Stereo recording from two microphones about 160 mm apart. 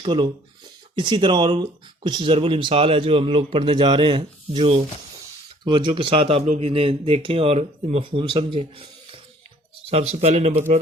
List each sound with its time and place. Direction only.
0.0 s speech: 30° right (ahead or behind)